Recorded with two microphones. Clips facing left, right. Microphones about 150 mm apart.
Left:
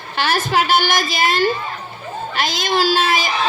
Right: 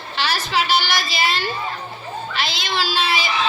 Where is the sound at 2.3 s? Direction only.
45° left (ahead or behind).